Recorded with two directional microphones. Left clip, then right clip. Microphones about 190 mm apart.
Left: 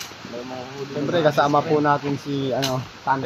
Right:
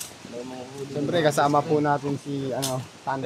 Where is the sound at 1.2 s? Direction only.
25° right (ahead or behind).